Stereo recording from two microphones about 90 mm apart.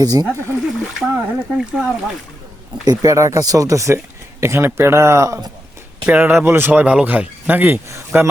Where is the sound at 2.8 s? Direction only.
45° right (ahead or behind).